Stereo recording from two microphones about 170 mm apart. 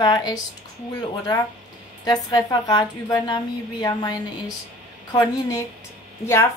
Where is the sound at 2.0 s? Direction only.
25° left (ahead or behind).